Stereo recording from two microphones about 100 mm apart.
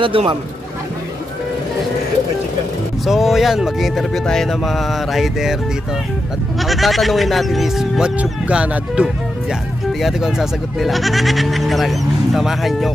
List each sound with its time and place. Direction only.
0.0 s speech: 60° right (ahead or behind)
3.1 s speech: 5° right (ahead or behind)
6.6 s speech: centre (ahead or behind)